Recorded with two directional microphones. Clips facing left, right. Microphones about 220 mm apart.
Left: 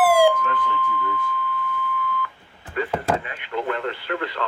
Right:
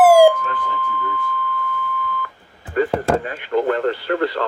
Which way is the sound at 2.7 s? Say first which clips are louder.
Right 7 dB; 45° right (ahead or behind).